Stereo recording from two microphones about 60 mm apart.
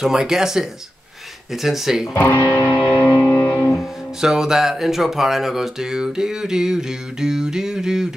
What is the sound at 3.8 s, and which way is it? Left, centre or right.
A man's voice, centre.